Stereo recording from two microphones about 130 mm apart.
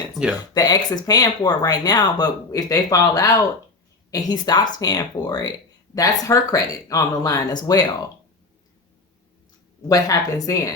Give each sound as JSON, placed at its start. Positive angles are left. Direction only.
{"t": 0.1, "sound": "speech", "side_deg": 0}
{"t": 0.5, "sound": "speech", "side_deg": 30}
{"t": 9.9, "sound": "speech", "side_deg": 25}